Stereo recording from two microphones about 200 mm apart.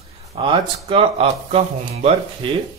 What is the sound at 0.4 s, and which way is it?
Speech, 25° right (ahead or behind).